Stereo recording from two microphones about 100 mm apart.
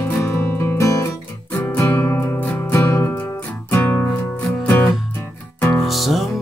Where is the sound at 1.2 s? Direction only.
20° left (ahead or behind).